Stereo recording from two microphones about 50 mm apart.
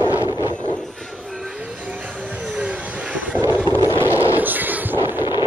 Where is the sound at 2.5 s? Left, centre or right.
Right.